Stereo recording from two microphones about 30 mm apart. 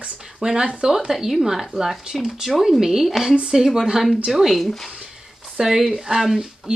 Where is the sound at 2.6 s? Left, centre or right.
Centre.